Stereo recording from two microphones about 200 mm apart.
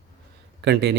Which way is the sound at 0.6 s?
55° right (ahead or behind).